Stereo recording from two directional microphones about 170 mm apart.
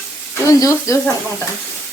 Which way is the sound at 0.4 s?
20° left (ahead or behind).